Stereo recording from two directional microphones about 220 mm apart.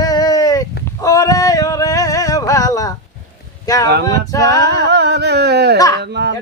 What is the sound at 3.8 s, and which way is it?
Speech, 55° right (ahead or behind).